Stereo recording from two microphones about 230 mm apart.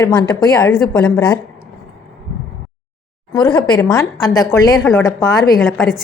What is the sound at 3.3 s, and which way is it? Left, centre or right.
A woman's voice, centre.